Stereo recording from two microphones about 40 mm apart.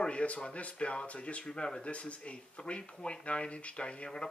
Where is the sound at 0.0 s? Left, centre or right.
Left.